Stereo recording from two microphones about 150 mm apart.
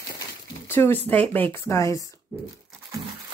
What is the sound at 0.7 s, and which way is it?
Speech, 15° left (ahead or behind).